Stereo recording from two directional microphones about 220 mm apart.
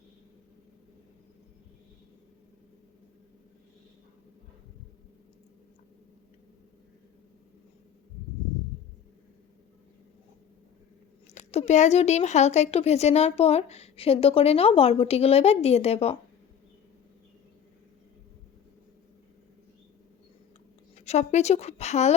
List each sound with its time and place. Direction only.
11.3 s speech: 30° left (ahead or behind)
20.9 s a woman's voice: 30° left (ahead or behind)